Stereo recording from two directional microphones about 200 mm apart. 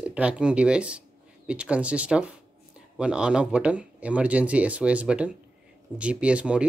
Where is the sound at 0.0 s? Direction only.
5° right (ahead or behind).